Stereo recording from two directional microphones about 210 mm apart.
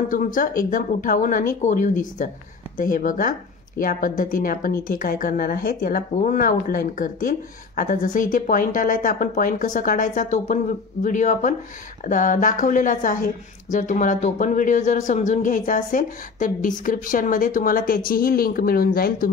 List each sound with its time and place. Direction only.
0.1 s a woman's voice: 40° left (ahead or behind)